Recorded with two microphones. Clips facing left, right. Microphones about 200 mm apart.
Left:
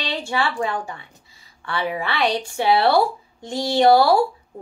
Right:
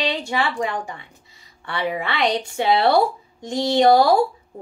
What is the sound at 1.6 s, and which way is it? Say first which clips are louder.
Speech: even; 20° right (ahead or behind).